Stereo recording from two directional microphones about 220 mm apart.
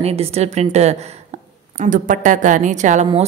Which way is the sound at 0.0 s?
25° right (ahead or behind).